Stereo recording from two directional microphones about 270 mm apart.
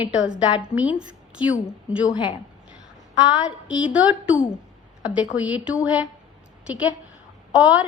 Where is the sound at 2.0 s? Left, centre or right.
Centre.